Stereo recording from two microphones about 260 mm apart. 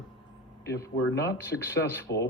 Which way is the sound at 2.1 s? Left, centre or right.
Left.